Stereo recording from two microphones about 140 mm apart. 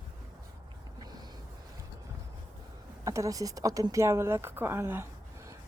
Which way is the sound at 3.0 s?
20° right (ahead or behind).